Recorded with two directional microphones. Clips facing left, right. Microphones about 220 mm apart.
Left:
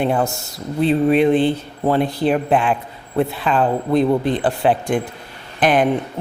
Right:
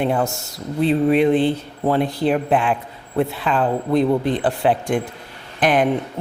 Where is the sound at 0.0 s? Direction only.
30° left (ahead or behind).